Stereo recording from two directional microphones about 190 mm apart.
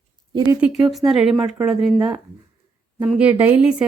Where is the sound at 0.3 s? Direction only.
20° right (ahead or behind).